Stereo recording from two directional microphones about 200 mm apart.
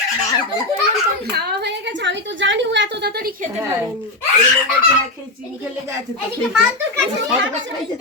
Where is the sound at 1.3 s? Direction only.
55° right (ahead or behind).